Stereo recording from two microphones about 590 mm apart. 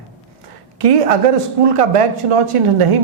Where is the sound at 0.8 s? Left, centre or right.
Right.